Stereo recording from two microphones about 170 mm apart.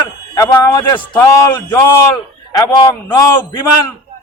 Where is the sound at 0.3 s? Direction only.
20° left (ahead or behind).